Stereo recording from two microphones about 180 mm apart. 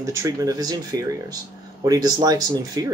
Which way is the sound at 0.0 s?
15° right (ahead or behind).